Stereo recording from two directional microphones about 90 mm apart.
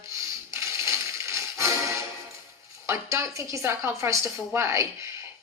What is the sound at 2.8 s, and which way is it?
Speech, 30° right (ahead or behind).